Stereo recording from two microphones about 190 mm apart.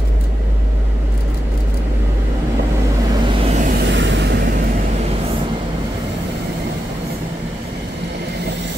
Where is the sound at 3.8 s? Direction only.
70° right (ahead or behind).